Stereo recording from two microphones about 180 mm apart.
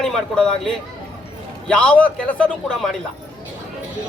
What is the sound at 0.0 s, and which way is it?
A man's voice, 5° left (ahead or behind).